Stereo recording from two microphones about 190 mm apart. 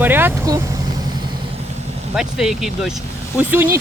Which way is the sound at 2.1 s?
Centre (ahead or behind).